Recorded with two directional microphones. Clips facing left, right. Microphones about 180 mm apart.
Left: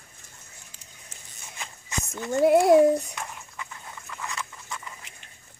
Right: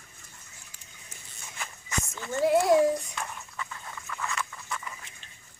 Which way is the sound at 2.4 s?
60° left (ahead or behind).